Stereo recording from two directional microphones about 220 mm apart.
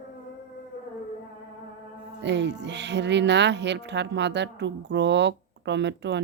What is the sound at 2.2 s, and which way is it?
Speech, 50° right (ahead or behind).